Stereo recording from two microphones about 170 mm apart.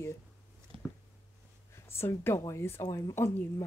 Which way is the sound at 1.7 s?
15° left (ahead or behind).